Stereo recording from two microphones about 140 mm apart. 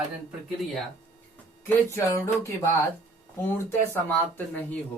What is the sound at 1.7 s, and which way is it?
Speech, 15° left (ahead or behind).